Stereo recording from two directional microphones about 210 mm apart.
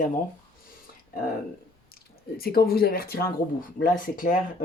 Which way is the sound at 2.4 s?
45° left (ahead or behind).